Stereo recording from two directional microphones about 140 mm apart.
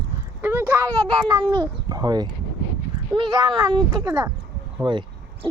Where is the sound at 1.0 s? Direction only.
30° right (ahead or behind).